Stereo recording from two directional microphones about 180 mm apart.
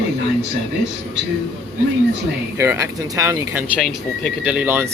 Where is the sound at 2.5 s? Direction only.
15° right (ahead or behind).